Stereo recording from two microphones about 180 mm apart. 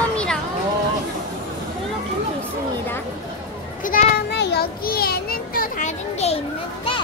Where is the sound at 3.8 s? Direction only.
55° left (ahead or behind).